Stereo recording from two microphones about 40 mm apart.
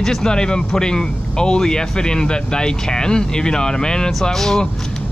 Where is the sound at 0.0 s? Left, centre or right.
Centre.